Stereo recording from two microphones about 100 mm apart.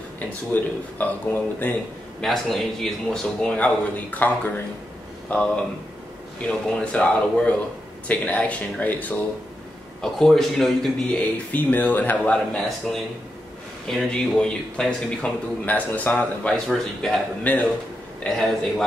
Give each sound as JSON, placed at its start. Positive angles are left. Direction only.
{"t": 0.5, "sound": "speech", "side_deg": 20}
{"t": 2.2, "sound": "a man's voice", "side_deg": 0}
{"t": 5.3, "sound": "a man's voice", "side_deg": 10}
{"t": 10.1, "sound": "speech", "side_deg": 5}
{"t": 11.5, "sound": "a man's voice", "side_deg": 20}
{"t": 12.5, "sound": "a man's voice", "side_deg": 0}
{"t": 16.6, "sound": "speech", "side_deg": 5}
{"t": 17.4, "sound": "a man's voice", "side_deg": 15}
{"t": 18.2, "sound": "speech", "side_deg": 5}